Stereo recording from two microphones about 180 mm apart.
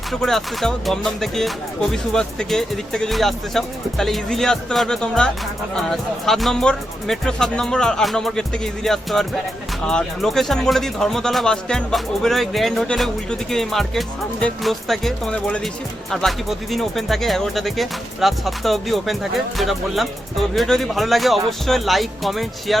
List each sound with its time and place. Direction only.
0.1 s speech: centre (ahead or behind)